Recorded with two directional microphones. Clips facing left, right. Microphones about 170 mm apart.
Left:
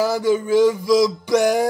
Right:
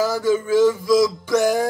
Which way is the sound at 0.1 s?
15° left (ahead or behind).